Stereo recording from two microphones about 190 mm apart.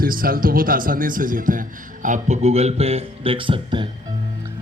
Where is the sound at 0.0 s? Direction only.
50° right (ahead or behind); by 3.8 s 25° right (ahead or behind).